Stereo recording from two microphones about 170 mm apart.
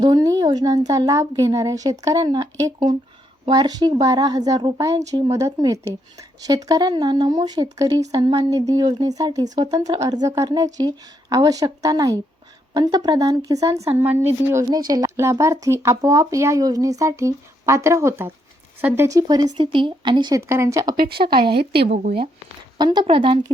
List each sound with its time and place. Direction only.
0.0 s speech: 20° right (ahead or behind)
20.9 s speech: 60° right (ahead or behind)
21.8 s speech: 40° right (ahead or behind)
22.8 s speech: 25° right (ahead or behind)